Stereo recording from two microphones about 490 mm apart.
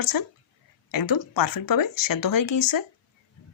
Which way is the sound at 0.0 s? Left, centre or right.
Left.